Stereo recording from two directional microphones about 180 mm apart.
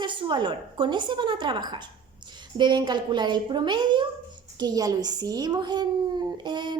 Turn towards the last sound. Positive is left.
turn(degrees=-25)  # may be behind; listen again after turning